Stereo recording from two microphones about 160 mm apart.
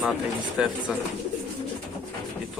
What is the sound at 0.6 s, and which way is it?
Speech, 5° right (ahead or behind).